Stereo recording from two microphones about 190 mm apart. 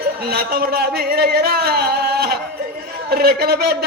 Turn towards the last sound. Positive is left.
turn(degrees=-55)  # may be behind; listen again after turning